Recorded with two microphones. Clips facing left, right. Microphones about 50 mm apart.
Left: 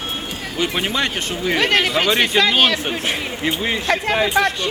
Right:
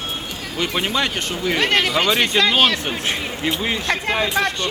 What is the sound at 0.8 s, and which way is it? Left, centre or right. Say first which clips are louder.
Speech: right 3 dB; centre.